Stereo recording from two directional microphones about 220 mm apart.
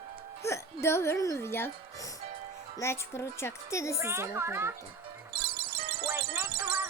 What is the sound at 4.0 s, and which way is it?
Speech, 10° right (ahead or behind).